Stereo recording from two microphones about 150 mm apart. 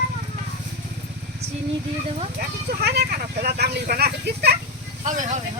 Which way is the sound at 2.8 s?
90° right.